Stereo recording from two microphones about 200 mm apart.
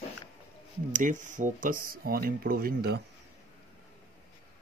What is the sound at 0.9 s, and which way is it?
Speech, 40° right (ahead or behind).